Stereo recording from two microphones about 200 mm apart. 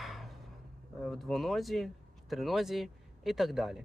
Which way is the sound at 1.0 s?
Centre (ahead or behind).